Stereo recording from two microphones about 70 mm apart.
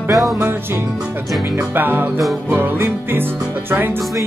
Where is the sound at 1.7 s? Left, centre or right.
Right.